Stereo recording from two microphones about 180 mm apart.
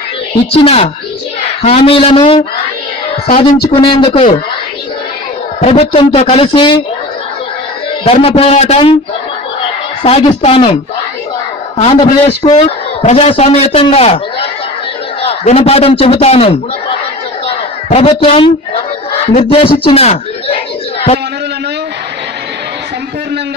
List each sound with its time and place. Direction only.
0.5 s a man's voice: 30° left (ahead or behind)
3.7 s a man's voice: 30° left (ahead or behind)
5.6 s a man's voice: 35° left (ahead or behind)
8.0 s a man's voice: 35° left (ahead or behind)
17.8 s a man's voice: 35° left (ahead or behind)
19.3 s a sound: 30° left (ahead or behind)